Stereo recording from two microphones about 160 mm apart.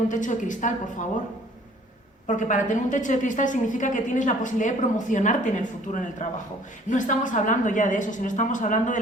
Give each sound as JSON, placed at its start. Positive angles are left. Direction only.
{"t": 0.1, "sound": "a woman's voice", "side_deg": 50}
{"t": 2.2, "sound": "a woman's voice", "side_deg": 50}